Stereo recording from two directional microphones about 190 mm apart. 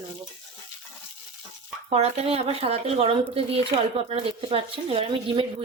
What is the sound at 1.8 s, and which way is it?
A woman's voice, 35° right (ahead or behind).